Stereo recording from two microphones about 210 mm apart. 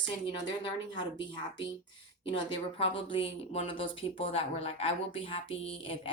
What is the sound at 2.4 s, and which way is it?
Speech, 25° left (ahead or behind).